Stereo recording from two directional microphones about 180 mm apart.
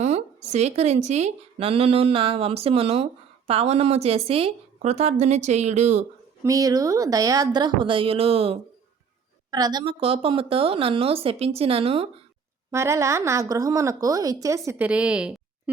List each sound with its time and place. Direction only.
0.0 s a woman's voice: 40° right (ahead or behind)
6.4 s speech: 20° right (ahead or behind)
9.5 s a woman's voice: 20° right (ahead or behind)
12.7 s a woman's voice: 15° right (ahead or behind)